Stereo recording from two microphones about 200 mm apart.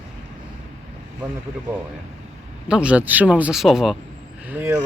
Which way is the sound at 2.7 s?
5° right (ahead or behind).